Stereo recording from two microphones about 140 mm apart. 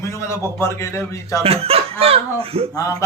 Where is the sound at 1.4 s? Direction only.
45° right (ahead or behind).